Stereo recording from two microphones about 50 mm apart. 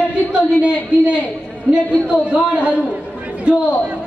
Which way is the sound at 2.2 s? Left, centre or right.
Right.